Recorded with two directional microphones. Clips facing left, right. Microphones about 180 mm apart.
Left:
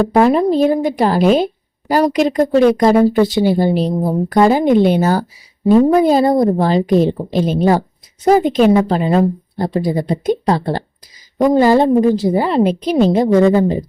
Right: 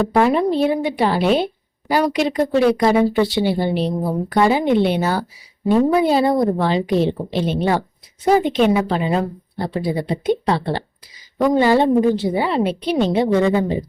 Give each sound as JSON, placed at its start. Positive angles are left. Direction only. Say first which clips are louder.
{"t": 0.2, "sound": "a woman's voice", "louder": "left 4 dB", "side_deg": 40}